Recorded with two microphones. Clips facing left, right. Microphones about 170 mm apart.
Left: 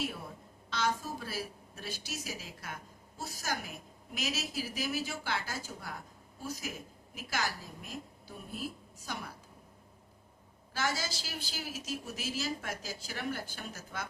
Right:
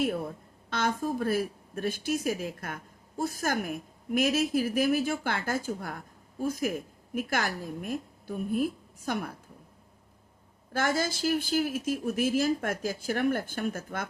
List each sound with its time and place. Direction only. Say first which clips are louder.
0.0 s a woman's voice: right 9 dB; 50° right (ahead or behind)
10.7 s a woman's voice: right 7 dB; 55° right (ahead or behind)